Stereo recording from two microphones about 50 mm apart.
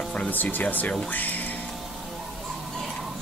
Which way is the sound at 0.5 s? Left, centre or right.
Left.